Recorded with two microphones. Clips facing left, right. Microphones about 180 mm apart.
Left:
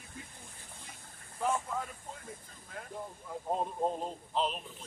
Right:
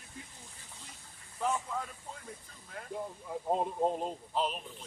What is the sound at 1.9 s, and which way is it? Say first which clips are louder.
Speech: even; 50° left (ahead or behind).